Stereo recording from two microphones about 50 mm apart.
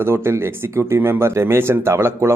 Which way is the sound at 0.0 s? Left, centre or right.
Right.